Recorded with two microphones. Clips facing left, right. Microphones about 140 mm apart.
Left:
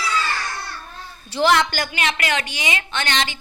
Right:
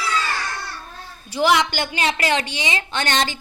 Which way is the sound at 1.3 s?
10° right (ahead or behind).